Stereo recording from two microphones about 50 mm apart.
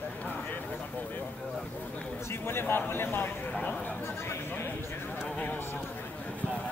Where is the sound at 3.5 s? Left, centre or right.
Centre.